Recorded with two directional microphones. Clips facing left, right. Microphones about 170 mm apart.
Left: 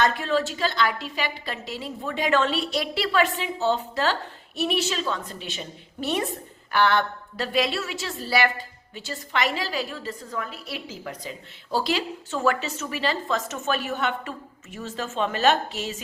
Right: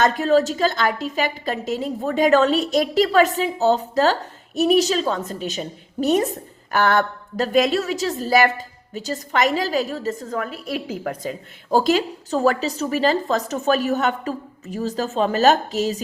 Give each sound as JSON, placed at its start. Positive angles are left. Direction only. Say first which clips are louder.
{"t": 0.0, "sound": "a woman's voice", "louder": "right 6 dB", "side_deg": -40}